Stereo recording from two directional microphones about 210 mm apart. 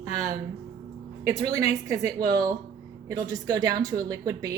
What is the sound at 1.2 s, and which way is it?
A woman's voice, 15° right (ahead or behind).